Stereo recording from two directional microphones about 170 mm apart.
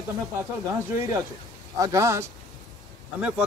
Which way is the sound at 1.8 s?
20° right (ahead or behind).